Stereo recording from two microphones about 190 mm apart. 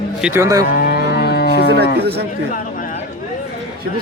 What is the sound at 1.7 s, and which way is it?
Speech, 60° right (ahead or behind).